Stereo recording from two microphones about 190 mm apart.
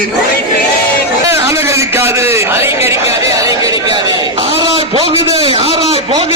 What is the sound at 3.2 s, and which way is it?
Chatter, 15° right (ahead or behind).